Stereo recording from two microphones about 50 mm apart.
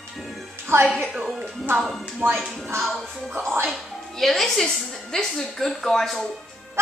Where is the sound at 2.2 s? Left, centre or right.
Right.